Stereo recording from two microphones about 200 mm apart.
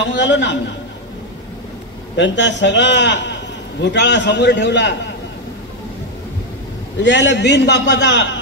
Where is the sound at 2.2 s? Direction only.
60° left (ahead or behind).